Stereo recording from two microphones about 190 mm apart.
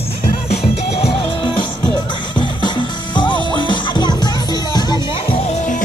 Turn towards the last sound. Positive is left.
turn(degrees=35)  # may be behind; listen again after turning